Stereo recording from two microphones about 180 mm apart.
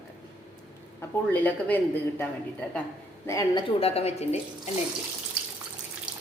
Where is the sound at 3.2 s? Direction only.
20° left (ahead or behind); by 4.7 s 35° left (ahead or behind).